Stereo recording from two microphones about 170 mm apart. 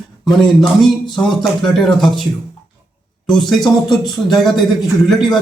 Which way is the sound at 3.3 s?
Centre (ahead or behind).